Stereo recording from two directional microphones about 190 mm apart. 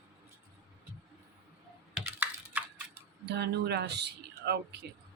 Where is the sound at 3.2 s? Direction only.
60° right (ahead or behind).